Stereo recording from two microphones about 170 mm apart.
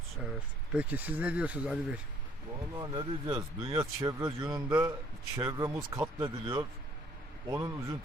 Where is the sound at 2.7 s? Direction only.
25° right (ahead or behind).